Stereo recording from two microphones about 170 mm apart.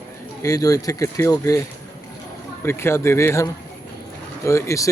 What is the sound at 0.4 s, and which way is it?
Speech, 20° left (ahead or behind).